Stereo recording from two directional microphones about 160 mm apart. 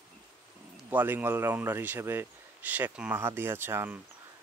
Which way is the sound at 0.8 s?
10° right (ahead or behind).